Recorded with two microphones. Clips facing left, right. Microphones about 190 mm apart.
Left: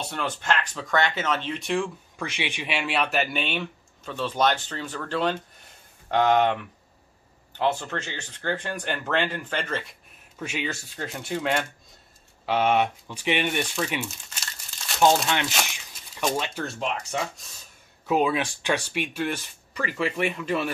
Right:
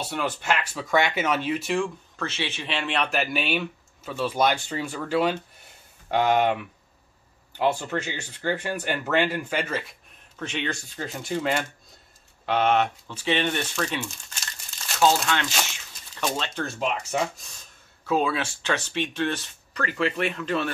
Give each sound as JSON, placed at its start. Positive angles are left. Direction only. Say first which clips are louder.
{"t": 0.0, "sound": "speech", "louder": "right 2 dB", "side_deg": -5}
{"t": 2.1, "sound": "speech", "louder": "even", "side_deg": 15}
{"t": 10.4, "sound": "speech", "louder": "right 1 dB", "side_deg": 5}
{"t": 12.4, "sound": "speech", "louder": "even", "side_deg": 10}
{"t": 15.2, "sound": "crumpling", "louder": "even", "side_deg": 20}
{"t": 16.3, "sound": "speech", "louder": "left 1 dB", "side_deg": 10}
{"t": 16.6, "sound": "speech", "louder": "right 2 dB", "side_deg": -5}
{"t": 18.0, "sound": "speech", "louder": "left 1 dB", "side_deg": 15}